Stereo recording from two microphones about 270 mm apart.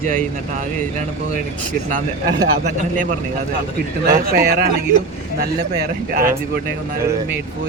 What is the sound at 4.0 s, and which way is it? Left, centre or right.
Speech, right.